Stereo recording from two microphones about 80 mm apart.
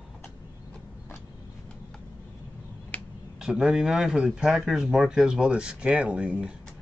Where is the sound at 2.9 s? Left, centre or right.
Centre.